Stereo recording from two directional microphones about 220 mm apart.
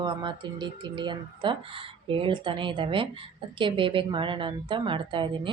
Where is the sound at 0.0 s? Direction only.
20° right (ahead or behind).